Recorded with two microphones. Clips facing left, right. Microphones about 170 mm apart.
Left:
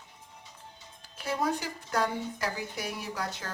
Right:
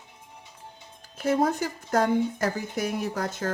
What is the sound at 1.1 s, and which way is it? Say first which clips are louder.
Speech: right 7 dB; 45° right (ahead or behind).